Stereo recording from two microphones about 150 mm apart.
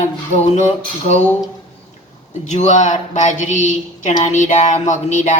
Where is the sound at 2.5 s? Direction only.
55° left (ahead or behind).